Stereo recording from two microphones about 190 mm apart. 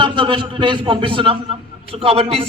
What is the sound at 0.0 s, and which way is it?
A man's voice, 25° right (ahead or behind).